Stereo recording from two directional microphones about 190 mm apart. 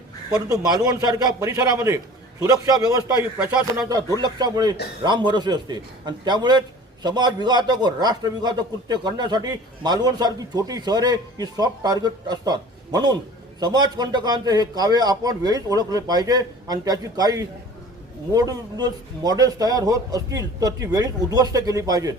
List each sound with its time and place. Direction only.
0.3 s speech: 5° right (ahead or behind)
0.5 s a man's voice: 20° right (ahead or behind)
3.4 s speech: 5° right (ahead or behind)
3.8 s a man's voice: 20° right (ahead or behind)